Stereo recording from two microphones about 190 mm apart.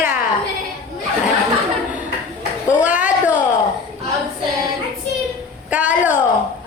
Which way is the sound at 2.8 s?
40° left (ahead or behind).